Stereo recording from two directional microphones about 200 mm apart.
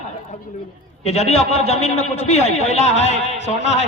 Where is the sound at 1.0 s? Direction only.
30° left (ahead or behind).